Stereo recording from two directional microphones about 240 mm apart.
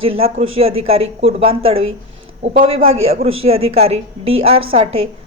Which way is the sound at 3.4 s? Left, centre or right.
Right.